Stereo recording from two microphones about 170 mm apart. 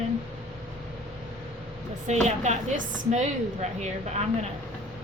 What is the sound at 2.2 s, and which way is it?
A woman's voice, 40° right (ahead or behind).